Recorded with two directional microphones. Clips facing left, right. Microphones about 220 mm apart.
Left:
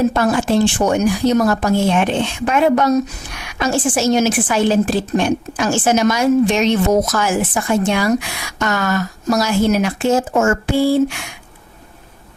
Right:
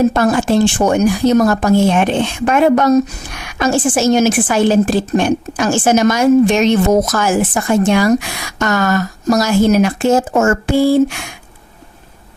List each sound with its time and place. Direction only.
0.1 s a woman's voice: 45° right (ahead or behind)